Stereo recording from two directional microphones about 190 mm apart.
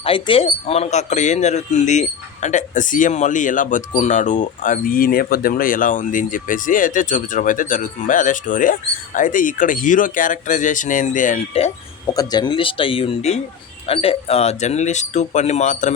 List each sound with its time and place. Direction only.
0.0 s speech: 30° left (ahead or behind)
12.1 s speech: 20° left (ahead or behind); by 15.9 s 40° left (ahead or behind)